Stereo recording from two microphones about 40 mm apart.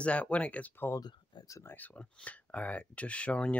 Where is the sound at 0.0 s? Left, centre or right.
Left.